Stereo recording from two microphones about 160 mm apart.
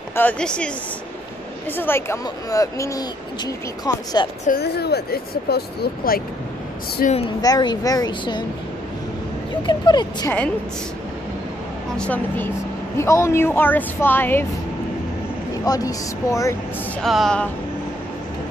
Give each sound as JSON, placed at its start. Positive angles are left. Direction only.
{"t": 0.1, "sound": "a woman's voice", "side_deg": 10}
{"t": 1.8, "sound": "speech", "side_deg": 15}
{"t": 4.5, "sound": "speech", "side_deg": 85}
{"t": 7.0, "sound": "speech", "side_deg": 65}
{"t": 7.4, "sound": "speech", "side_deg": 25}
{"t": 9.6, "sound": "speech", "side_deg": 30}
{"t": 12.0, "sound": "a woman's voice", "side_deg": 10}
{"t": 15.6, "sound": "speech", "side_deg": 25}
{"t": 17.0, "sound": "speech", "side_deg": 0}